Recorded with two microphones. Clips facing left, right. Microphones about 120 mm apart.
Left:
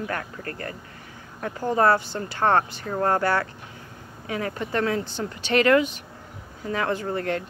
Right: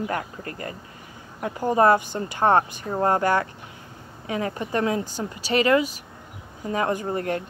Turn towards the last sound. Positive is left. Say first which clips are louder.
# right 1 dB
turn(degrees=-20)  # may be behind; listen again after turning